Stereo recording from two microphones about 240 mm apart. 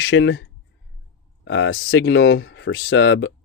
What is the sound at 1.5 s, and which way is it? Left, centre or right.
Speech, left.